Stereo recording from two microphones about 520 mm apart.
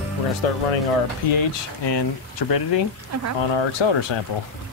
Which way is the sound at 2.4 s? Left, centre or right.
Left.